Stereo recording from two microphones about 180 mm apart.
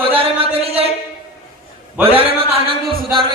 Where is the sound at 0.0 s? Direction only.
30° right (ahead or behind).